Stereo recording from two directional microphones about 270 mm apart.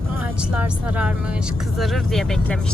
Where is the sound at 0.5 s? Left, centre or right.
Centre.